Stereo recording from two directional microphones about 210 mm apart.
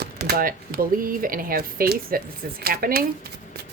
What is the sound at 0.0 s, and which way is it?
Speech, 50° right (ahead or behind).